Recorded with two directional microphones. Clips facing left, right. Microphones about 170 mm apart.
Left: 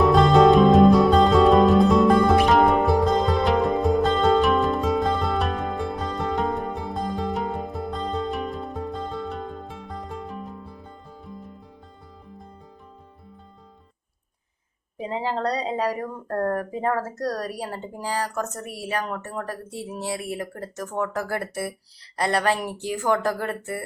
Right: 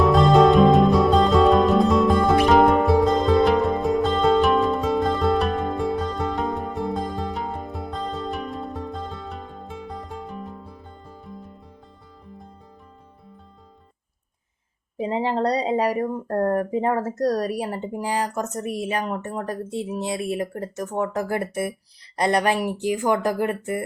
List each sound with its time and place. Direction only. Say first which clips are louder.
0.0 s music: even; centre (ahead or behind)
14.9 s speech: right 4 dB; 25° right (ahead or behind)